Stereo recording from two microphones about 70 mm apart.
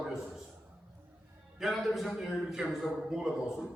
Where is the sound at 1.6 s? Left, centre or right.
Centre.